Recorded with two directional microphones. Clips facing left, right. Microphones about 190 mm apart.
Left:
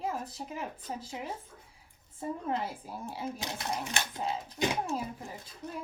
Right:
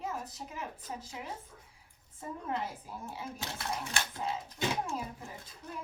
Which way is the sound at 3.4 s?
15° left (ahead or behind).